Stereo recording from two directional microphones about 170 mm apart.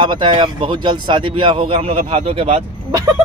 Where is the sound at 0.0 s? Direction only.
25° right (ahead or behind).